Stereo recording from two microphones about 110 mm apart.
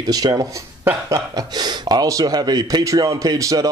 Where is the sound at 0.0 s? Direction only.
35° right (ahead or behind).